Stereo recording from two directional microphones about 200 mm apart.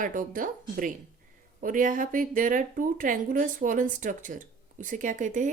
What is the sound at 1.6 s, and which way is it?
Speech, 40° right (ahead or behind).